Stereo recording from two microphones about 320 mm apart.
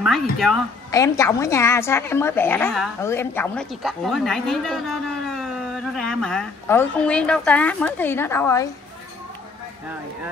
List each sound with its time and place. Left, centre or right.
0.0 s a woman's voice: centre